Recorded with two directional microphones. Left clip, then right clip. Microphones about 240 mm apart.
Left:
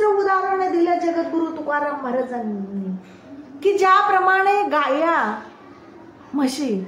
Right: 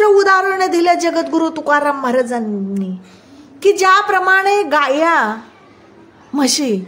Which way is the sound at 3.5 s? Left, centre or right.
Right.